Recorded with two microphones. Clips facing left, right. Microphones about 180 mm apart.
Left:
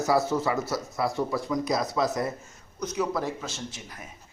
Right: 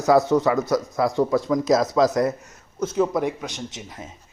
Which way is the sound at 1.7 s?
90° right.